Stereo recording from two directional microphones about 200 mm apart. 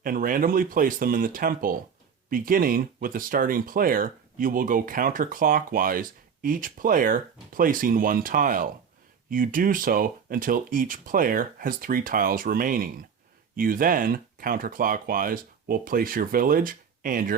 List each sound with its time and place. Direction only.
0.0 s speech: 45° right (ahead or behind)